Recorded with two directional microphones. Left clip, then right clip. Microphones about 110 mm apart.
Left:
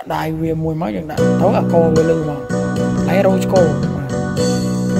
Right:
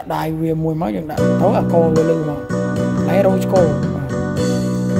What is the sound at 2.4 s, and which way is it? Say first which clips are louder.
Music: left 1 dB; 90° right.